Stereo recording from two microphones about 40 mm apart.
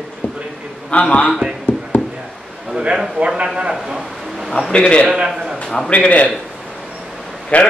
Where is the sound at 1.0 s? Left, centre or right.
Left.